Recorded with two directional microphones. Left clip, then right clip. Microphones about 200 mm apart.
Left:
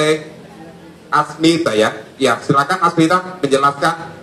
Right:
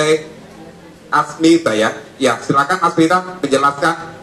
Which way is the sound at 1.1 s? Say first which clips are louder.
Right 2 dB; 45° left (ahead or behind).